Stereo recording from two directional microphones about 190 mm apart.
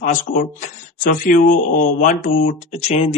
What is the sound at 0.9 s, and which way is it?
Speech, 45° left (ahead or behind).